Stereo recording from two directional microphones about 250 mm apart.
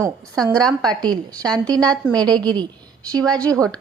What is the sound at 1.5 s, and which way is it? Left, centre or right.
Speech, centre.